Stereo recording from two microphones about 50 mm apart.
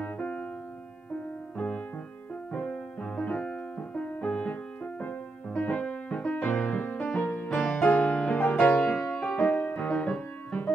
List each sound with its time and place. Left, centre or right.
2.5 s music: left
6.3 s music: left
7.1 s music: centre